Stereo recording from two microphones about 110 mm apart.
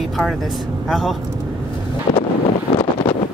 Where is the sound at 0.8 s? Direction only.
Centre (ahead or behind).